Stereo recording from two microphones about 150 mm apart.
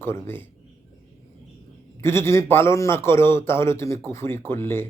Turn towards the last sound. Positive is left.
turn(degrees=15)  # may be behind; listen again after turning